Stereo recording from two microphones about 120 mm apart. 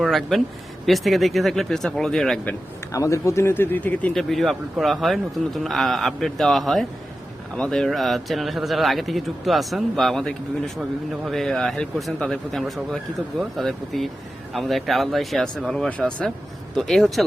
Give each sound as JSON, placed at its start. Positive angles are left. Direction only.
{"t": 0.0, "sound": "speech", "side_deg": 0}
{"t": 2.5, "sound": "speech", "side_deg": 25}
{"t": 4.1, "sound": "speech", "side_deg": 0}